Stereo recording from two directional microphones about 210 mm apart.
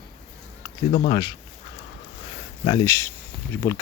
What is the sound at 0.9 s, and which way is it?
Speech, 20° left (ahead or behind).